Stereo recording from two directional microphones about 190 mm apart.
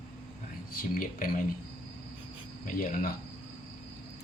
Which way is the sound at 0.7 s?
50° left (ahead or behind).